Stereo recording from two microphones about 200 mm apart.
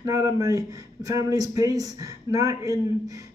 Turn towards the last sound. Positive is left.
turn(degrees=-15)  # may be behind; listen again after turning